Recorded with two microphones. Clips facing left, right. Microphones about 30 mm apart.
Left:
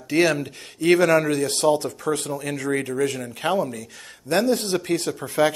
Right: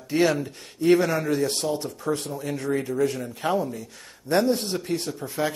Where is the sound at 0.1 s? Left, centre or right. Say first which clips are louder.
Left 2 dB; left.